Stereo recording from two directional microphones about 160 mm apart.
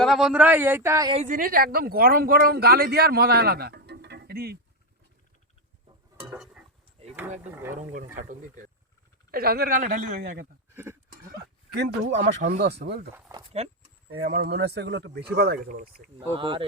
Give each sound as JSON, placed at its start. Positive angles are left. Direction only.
{"t": 0.0, "sound": "a man's voice", "side_deg": 0}
{"t": 1.3, "sound": "speech", "side_deg": -60}
{"t": 6.2, "sound": "a sound", "side_deg": -5}
{"t": 7.4, "sound": "a man's voice", "side_deg": -10}
{"t": 7.9, "sound": "speech", "side_deg": -55}
{"t": 9.3, "sound": "speech", "side_deg": -70}
{"t": 11.1, "sound": "bleat", "side_deg": -75}
{"t": 12.5, "sound": "speech", "side_deg": -85}
{"t": 13.3, "sound": "a man's voice", "side_deg": -15}
{"t": 14.1, "sound": "speech", "side_deg": -70}
{"t": 16.3, "sound": "speech", "side_deg": -30}